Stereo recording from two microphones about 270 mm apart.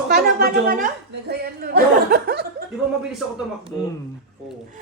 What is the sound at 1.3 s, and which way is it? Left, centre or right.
Chuckle, right.